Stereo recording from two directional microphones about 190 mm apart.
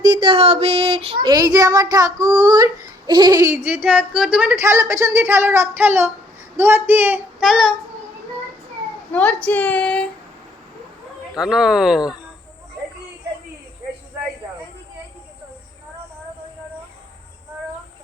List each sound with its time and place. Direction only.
0.0 s child singing: 25° right (ahead or behind)
3.1 s speech: 20° right (ahead or behind); by 7.7 s centre (ahead or behind)
9.1 s speech: 5° left (ahead or behind)
11.3 s speech: 5° right (ahead or behind)